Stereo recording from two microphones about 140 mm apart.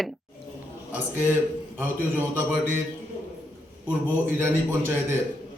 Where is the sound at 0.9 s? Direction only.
15° right (ahead or behind).